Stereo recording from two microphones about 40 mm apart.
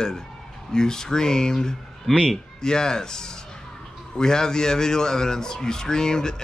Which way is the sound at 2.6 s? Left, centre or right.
Centre.